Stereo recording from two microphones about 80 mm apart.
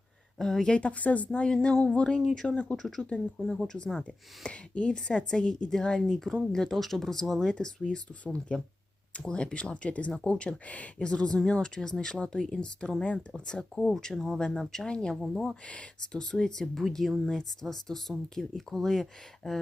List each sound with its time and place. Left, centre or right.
0.3 s speech: centre
15.1 s speech: centre
15.6 s speech: centre